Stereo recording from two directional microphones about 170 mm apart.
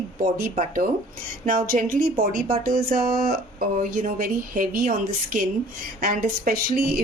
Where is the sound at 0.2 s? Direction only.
55° right (ahead or behind).